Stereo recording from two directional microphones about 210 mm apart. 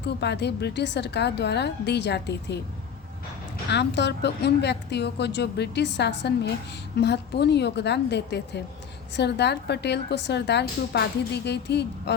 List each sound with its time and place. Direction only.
0.0 s a woman's voice: 55° left (ahead or behind)
3.7 s a woman's voice: 55° left (ahead or behind)